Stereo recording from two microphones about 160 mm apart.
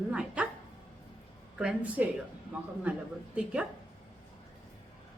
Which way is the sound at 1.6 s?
10° right (ahead or behind).